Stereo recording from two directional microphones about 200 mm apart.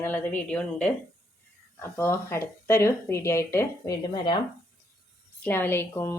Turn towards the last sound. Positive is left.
turn(degrees=10)  # may be behind; listen again after turning